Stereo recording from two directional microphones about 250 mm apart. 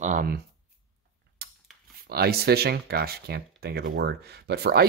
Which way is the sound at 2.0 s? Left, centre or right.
Right.